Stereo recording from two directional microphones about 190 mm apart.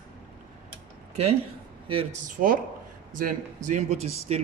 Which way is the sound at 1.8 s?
30° right (ahead or behind).